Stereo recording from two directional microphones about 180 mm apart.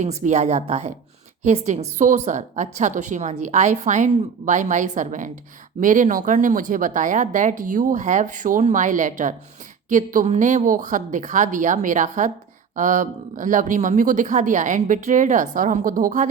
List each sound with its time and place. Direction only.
0.0 s a woman's voice: 40° right (ahead or behind)